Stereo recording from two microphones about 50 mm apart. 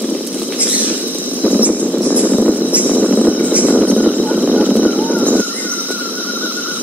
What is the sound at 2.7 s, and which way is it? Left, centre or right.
Vehicle, right.